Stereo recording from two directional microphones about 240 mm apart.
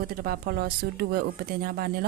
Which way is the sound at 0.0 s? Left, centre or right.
Right.